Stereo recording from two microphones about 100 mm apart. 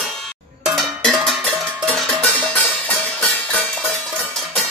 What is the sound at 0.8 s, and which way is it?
Music, centre (ahead or behind).